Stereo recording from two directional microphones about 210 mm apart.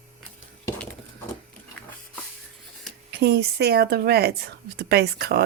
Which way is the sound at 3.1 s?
50° right (ahead or behind).